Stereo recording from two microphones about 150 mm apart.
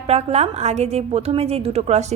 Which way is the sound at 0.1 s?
45° right (ahead or behind).